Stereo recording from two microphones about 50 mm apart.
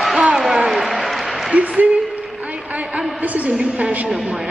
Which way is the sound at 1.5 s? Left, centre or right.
Right.